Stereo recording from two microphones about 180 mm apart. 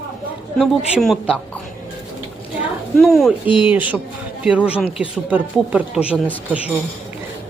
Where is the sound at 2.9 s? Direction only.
Centre (ahead or behind).